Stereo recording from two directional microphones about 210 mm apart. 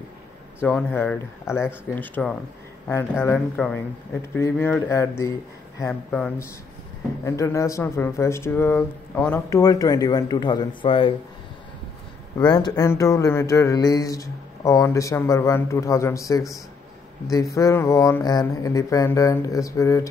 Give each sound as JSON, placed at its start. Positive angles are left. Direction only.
{"t": 0.6, "sound": "speech", "side_deg": 5}
{"t": 12.4, "sound": "speech", "side_deg": 20}